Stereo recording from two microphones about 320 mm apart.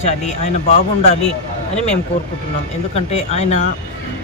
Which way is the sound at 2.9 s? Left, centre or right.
Centre.